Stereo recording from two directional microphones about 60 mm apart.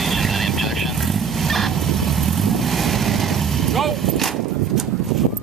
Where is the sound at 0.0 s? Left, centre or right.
Centre.